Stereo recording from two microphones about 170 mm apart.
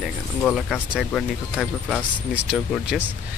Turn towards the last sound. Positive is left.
turn(degrees=-5)  # may be behind; listen again after turning